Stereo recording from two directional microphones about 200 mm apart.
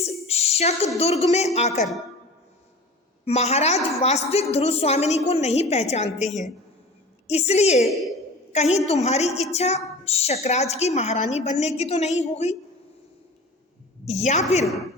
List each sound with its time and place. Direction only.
0.0 s a sound: 30° left (ahead or behind)
0.9 s a woman's voice: 30° left (ahead or behind)
3.2 s a woman's voice: 35° left (ahead or behind)
14.1 s a woman's voice: 35° left (ahead or behind)